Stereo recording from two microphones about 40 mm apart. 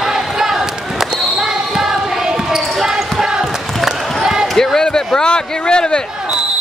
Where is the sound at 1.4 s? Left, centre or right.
Centre.